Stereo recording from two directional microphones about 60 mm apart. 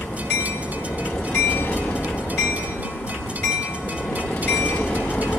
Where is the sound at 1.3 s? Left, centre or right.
Left.